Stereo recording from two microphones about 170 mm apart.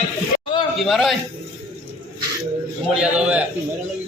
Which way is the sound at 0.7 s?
Centre (ahead or behind).